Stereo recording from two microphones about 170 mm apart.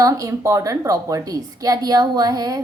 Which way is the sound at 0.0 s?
20° right (ahead or behind).